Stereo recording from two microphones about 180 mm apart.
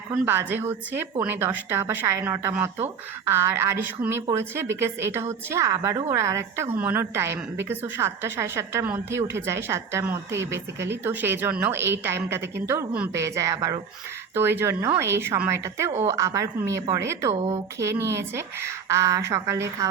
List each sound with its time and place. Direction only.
0.1 s a woman's voice: 10° right (ahead or behind)